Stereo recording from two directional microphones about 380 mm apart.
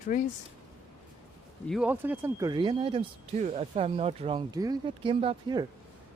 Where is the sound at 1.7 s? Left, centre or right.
Centre.